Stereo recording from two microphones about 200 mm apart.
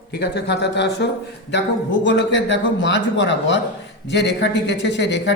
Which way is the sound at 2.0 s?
65° left (ahead or behind).